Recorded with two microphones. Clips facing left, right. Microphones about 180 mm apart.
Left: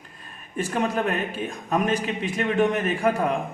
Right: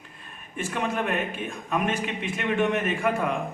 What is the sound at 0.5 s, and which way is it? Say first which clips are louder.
A man's voice: left 4 dB; 40° left (ahead or behind).